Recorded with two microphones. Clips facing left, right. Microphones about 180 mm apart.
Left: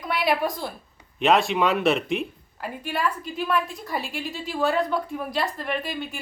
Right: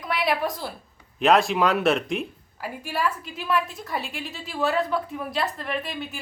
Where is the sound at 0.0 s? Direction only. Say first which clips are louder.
Left 1 dB; centre (ahead or behind).